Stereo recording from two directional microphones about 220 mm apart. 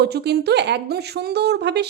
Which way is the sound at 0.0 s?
45° right (ahead or behind).